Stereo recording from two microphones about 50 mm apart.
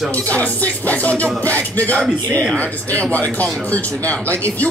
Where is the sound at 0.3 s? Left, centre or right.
Left.